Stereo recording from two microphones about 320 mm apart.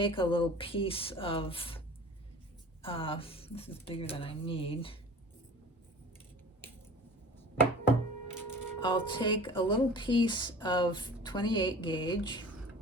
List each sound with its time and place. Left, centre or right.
0.0 s music: centre
2.8 s music: centre
8.8 s music: centre